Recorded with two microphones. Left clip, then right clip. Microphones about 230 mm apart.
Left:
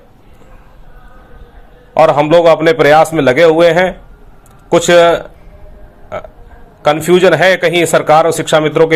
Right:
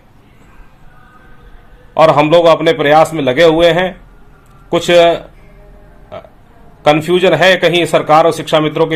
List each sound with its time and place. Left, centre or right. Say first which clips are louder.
1.9 s a man's voice: even; centre
6.8 s a man's voice: left 1 dB; centre